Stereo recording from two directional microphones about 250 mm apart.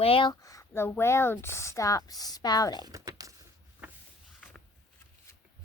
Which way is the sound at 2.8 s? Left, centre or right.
Centre.